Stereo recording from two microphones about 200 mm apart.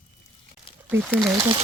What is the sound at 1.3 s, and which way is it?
Speech, 15° right (ahead or behind).